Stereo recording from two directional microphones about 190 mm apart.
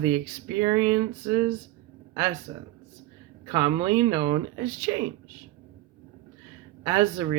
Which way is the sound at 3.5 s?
20° right (ahead or behind).